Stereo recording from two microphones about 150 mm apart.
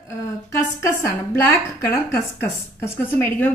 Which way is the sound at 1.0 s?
20° left (ahead or behind).